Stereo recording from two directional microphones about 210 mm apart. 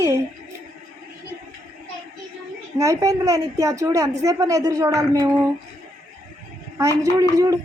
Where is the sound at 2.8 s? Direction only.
15° right (ahead or behind).